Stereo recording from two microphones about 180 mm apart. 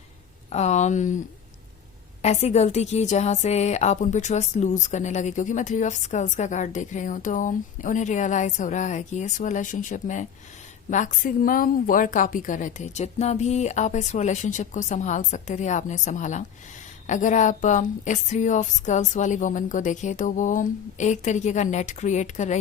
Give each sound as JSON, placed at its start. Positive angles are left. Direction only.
{"t": 0.5, "sound": "speech", "side_deg": 40}
{"t": 2.2, "sound": "a woman's voice", "side_deg": 40}